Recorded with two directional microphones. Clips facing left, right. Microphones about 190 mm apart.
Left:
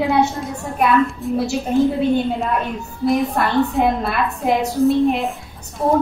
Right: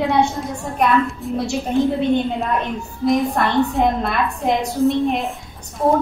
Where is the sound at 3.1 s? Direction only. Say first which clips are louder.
Even; centre (ahead or behind).